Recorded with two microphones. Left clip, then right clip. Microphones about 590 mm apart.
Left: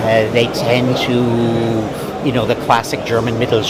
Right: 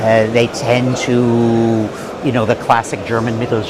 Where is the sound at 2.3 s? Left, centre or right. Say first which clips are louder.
Right 1 dB; right.